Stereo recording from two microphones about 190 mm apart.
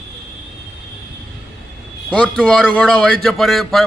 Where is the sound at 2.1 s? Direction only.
5° left (ahead or behind).